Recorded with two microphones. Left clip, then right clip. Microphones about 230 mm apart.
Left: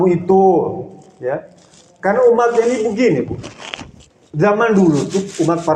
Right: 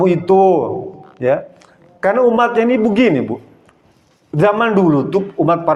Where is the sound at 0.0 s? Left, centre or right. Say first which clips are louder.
Right 1 dB; right.